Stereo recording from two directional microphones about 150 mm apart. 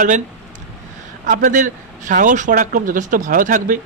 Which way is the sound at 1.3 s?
60° right (ahead or behind).